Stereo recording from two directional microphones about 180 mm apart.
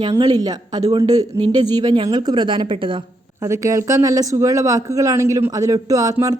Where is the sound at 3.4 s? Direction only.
15° right (ahead or behind).